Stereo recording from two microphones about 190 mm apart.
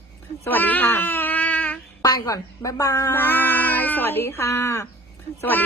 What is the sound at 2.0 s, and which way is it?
A woman's voice, 20° left (ahead or behind).